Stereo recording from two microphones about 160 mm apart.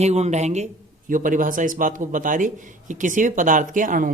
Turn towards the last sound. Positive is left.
turn(degrees=-55)  # may be behind; listen again after turning